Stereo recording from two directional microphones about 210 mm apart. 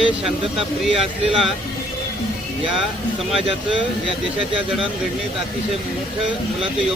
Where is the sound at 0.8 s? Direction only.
Centre (ahead or behind).